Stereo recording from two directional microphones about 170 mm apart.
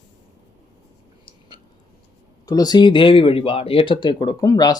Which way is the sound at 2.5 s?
25° left (ahead or behind).